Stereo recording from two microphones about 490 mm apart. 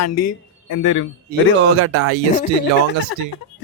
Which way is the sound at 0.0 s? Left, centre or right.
Left.